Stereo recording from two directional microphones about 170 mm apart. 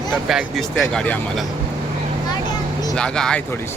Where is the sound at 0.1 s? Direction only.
Centre (ahead or behind).